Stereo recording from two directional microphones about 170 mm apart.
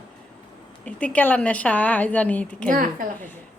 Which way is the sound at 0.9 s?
5° left (ahead or behind).